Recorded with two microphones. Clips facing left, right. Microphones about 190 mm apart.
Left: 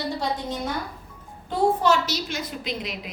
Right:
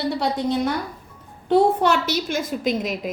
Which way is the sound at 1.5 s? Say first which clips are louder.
Right 4 dB; 60° right (ahead or behind).